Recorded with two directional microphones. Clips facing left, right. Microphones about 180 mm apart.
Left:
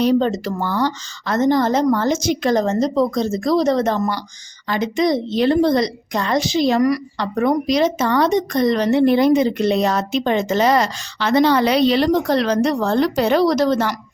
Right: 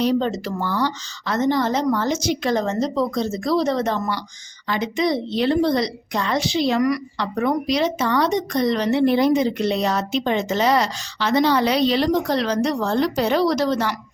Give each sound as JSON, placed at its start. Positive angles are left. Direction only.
{"t": 0.0, "sound": "a woman's voice", "side_deg": 50}